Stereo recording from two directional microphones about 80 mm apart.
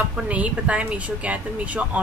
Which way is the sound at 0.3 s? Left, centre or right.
Centre.